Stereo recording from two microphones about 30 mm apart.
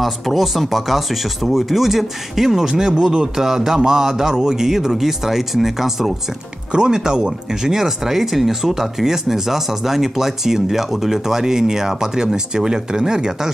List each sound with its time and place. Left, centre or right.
0.0 s speech: centre
2.5 s speech: centre
3.3 s speech: centre
6.7 s speech: right